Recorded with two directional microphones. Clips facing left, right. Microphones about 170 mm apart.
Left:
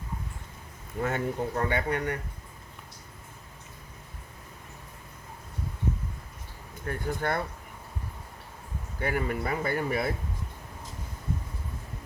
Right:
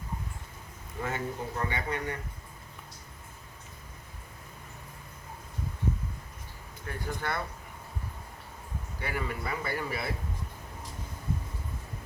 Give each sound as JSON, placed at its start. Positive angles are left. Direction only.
{"t": 1.0, "sound": "speech", "side_deg": 55}
{"t": 6.8, "sound": "speech", "side_deg": 50}
{"t": 9.0, "sound": "speech", "side_deg": 50}